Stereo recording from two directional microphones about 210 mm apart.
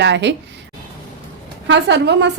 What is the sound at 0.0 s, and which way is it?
Speech, 55° right (ahead or behind).